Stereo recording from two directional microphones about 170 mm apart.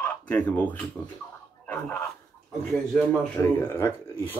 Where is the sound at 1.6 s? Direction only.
10° left (ahead or behind).